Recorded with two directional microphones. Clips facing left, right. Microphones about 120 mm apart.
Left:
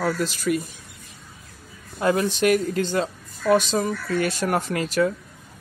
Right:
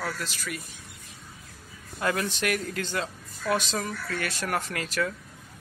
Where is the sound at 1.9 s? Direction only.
25° left (ahead or behind).